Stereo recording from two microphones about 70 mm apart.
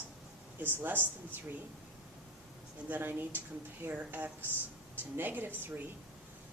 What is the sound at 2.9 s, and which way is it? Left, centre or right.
Speech, right.